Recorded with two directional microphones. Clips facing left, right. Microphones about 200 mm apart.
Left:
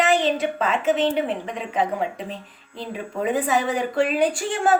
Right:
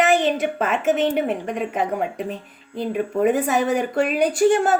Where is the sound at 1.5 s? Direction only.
50° right (ahead or behind).